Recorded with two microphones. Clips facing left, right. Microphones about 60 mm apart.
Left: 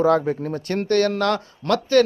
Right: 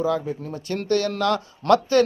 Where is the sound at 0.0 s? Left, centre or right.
Left.